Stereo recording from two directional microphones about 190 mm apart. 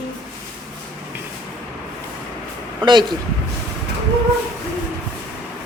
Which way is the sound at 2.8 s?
25° right (ahead or behind).